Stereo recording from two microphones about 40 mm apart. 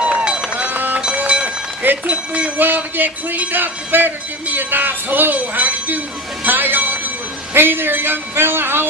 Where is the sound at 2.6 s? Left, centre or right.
Right.